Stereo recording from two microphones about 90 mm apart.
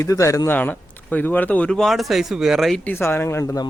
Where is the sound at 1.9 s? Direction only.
Centre (ahead or behind).